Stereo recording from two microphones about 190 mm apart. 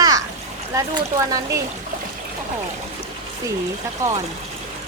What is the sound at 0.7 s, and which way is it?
Speech, 15° right (ahead or behind).